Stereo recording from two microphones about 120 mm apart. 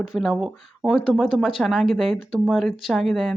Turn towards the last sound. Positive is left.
turn(degrees=0)  # may be behind; listen again after turning